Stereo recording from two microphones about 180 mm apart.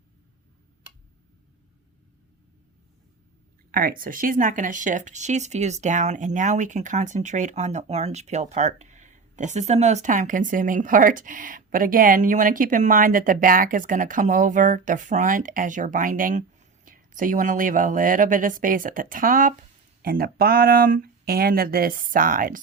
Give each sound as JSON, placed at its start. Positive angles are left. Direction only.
{"t": 3.7, "sound": "speech", "side_deg": -50}